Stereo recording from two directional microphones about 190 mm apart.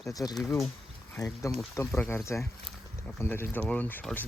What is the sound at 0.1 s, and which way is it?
Speech, 20° left (ahead or behind).